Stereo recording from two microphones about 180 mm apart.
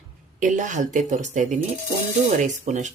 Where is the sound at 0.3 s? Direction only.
45° right (ahead or behind).